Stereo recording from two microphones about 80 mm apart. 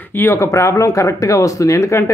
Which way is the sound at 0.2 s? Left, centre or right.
Left.